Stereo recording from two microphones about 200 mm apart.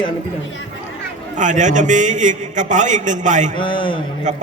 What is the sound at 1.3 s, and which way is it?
A man's voice, 40° right (ahead or behind).